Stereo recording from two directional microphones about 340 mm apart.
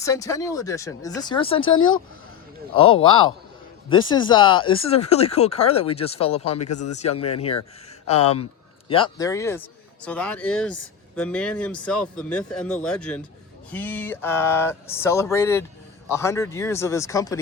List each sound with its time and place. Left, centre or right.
0.0 s speech: centre
6.7 s speech: left
6.9 s speech: centre